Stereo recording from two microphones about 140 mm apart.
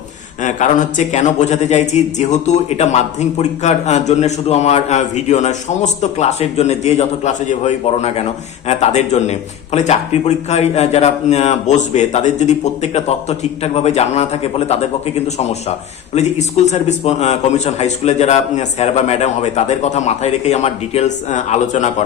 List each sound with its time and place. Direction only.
0.4 s a man's voice: 65° left (ahead or behind)